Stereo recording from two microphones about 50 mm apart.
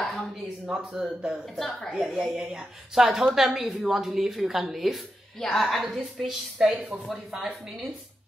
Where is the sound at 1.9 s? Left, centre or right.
Centre.